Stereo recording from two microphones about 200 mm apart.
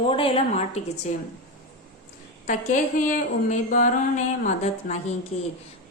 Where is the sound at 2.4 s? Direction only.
40° left (ahead or behind).